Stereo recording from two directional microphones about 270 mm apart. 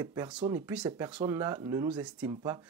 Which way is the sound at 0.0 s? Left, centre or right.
Centre.